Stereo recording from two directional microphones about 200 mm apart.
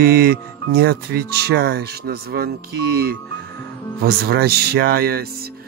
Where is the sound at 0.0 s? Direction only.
50° right (ahead or behind).